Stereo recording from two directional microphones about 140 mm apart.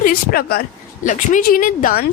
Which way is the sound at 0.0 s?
90° left.